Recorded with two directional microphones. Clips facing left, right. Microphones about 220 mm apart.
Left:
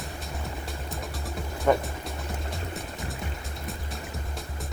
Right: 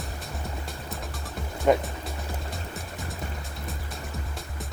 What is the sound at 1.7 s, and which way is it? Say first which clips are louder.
Speech: right 2 dB; 20° right (ahead or behind).